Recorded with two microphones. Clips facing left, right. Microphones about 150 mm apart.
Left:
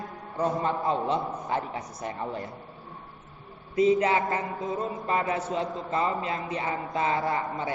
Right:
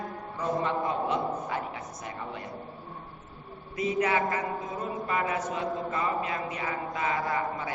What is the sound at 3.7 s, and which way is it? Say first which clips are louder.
A man's voice: left 5 dB; 30° left (ahead or behind).